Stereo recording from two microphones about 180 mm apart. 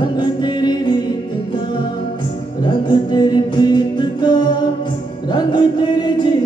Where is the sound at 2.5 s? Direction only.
25° left (ahead or behind).